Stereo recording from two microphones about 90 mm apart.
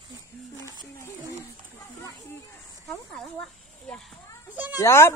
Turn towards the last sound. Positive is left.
turn(degrees=30)  # may be behind; listen again after turning